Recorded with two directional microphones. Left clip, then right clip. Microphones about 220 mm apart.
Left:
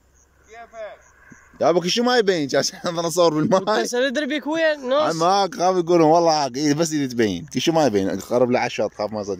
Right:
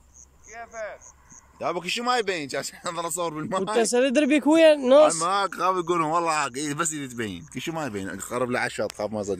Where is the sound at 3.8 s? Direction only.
10° right (ahead or behind).